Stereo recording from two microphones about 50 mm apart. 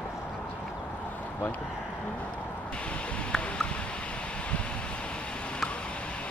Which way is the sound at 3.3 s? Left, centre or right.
Centre.